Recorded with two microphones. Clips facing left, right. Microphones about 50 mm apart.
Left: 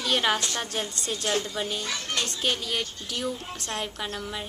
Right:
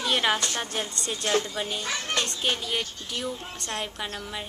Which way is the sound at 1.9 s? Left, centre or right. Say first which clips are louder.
Right 2 dB; right.